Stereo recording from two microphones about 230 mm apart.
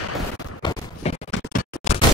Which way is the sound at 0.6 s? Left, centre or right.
Centre.